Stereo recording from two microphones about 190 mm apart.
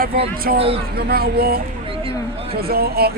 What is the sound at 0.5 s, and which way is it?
A man's voice, 50° right (ahead or behind).